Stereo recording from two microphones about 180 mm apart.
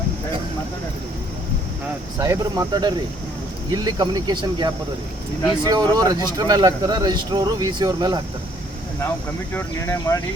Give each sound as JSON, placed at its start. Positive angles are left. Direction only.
{"t": 2.1, "sound": "speech", "side_deg": -15}
{"t": 9.6, "sound": "speech", "side_deg": 15}